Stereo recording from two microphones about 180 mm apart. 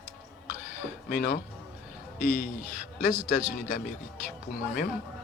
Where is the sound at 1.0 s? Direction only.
55° left (ahead or behind).